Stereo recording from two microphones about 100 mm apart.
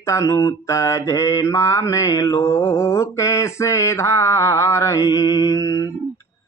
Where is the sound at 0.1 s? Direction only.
30° left (ahead or behind).